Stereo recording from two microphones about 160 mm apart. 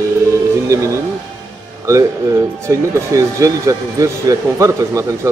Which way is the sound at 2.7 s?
20° right (ahead or behind).